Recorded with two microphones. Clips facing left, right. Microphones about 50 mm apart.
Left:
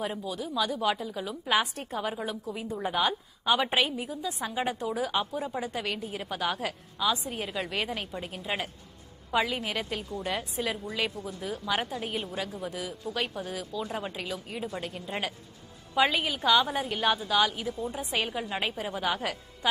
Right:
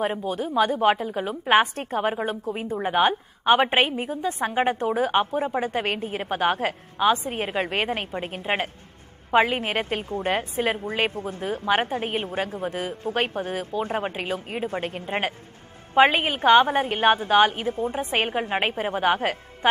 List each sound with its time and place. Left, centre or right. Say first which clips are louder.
0.0 s a woman's voice: right 7 dB; right